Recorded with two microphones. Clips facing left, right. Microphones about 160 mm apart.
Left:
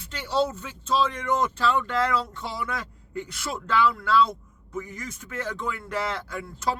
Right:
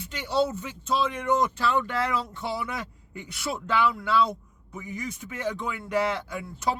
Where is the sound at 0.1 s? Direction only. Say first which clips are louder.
Even; 15° right (ahead or behind).